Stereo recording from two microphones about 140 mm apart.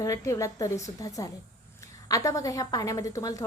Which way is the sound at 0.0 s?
20° left (ahead or behind).